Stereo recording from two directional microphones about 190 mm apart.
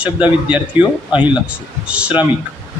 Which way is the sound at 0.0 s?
5° right (ahead or behind).